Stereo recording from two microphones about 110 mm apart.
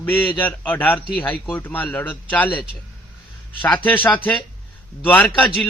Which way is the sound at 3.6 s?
15° left (ahead or behind).